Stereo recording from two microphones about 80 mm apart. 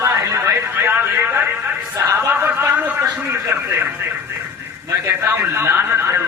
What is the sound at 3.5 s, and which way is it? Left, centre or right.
Radio, right.